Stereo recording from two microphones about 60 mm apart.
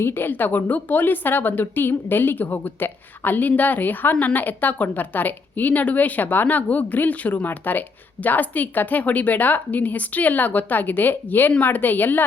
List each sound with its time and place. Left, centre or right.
0.0 s speech: left